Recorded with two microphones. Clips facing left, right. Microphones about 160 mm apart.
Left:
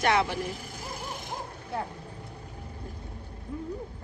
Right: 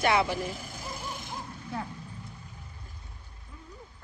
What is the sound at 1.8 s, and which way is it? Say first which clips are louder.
Vehicle: left 2 dB; 50° left (ahead or behind).